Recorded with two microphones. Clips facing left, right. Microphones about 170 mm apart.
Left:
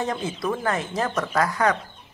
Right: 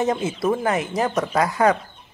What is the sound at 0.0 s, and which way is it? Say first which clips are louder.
Speech: right 5 dB; 20° right (ahead or behind).